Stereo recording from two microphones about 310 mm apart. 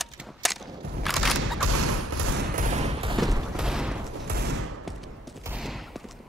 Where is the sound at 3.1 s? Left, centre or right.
Centre.